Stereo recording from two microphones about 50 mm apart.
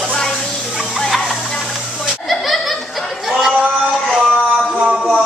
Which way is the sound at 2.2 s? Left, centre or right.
Centre.